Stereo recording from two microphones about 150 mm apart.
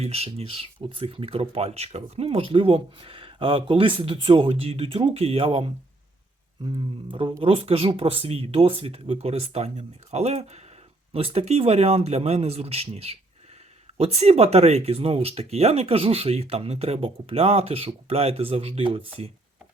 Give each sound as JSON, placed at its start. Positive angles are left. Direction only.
{"t": 0.0, "sound": "speech", "side_deg": -40}